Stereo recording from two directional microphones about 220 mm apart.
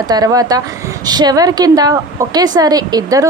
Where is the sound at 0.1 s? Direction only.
15° right (ahead or behind).